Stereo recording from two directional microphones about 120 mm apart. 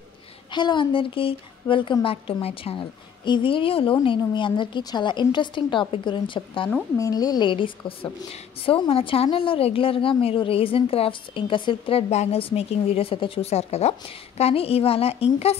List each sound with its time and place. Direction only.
0.5 s a woman's voice: 40° left (ahead or behind)
7.0 s a woman's voice: 30° left (ahead or behind); by 15.5 s 55° left (ahead or behind)